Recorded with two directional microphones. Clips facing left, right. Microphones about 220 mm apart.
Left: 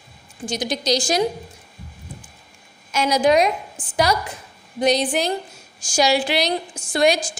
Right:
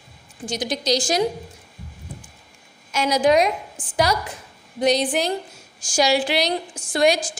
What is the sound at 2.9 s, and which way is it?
Speech, 45° right (ahead or behind).